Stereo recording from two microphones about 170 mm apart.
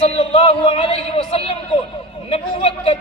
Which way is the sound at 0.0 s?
35° left (ahead or behind).